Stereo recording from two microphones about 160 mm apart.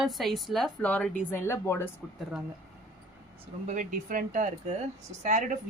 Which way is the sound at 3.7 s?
55° right (ahead or behind).